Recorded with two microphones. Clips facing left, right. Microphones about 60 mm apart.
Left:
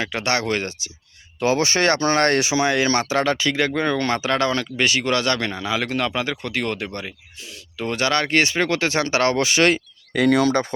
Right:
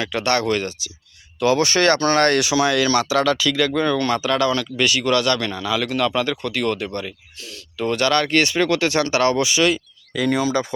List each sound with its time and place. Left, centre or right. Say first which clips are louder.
0.0 s speech: right 2 dB; left